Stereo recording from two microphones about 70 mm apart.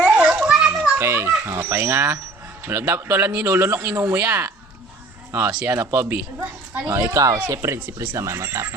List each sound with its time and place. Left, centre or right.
0.0 s children playing: centre
0.9 s a sound: right
1.5 s speech: right
5.6 s speech: right
6.8 s speech: right
7.3 s speech: right